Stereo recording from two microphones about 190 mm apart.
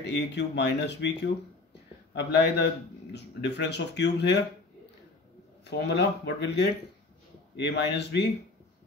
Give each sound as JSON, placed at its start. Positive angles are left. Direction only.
{"t": 0.0, "sound": "speech", "side_deg": 65}
{"t": 5.6, "sound": "speech", "side_deg": 60}